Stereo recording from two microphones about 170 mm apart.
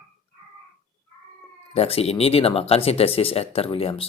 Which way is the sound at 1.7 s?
35° left (ahead or behind).